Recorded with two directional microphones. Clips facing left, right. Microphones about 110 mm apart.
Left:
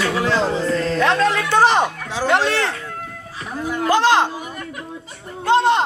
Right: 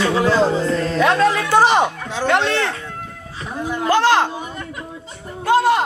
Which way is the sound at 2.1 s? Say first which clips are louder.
Even; 10° left (ahead or behind).